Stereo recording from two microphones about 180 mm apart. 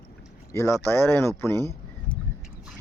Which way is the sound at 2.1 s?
30° left (ahead or behind).